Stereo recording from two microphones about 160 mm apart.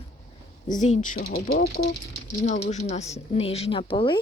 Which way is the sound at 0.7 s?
50° left (ahead or behind).